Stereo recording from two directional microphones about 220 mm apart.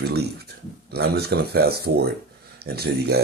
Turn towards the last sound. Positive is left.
turn(degrees=-45)  # may be behind; listen again after turning